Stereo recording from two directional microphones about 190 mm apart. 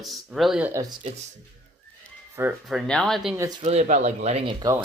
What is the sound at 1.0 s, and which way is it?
Speech, 40° right (ahead or behind).